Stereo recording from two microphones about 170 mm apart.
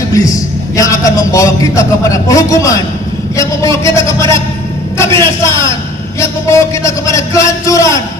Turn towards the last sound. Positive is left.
turn(degrees=20)  # may be behind; listen again after turning